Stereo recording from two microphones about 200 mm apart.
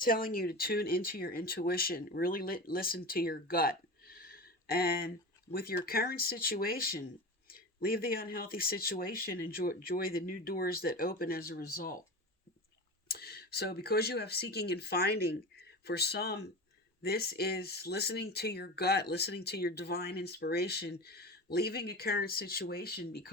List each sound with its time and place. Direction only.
0.0 s speech: 45° left (ahead or behind)
13.1 s speech: 50° left (ahead or behind)